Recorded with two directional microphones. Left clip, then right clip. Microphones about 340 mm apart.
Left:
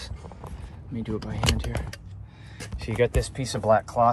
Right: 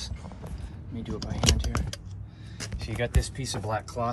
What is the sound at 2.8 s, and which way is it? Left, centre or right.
Speech, left.